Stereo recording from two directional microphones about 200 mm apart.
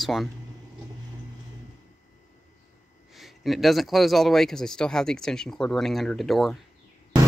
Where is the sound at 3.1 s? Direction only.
Centre (ahead or behind).